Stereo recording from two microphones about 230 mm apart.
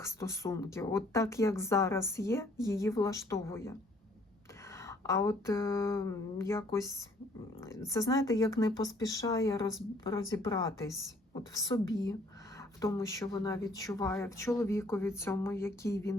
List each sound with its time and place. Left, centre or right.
0.0 s speech: centre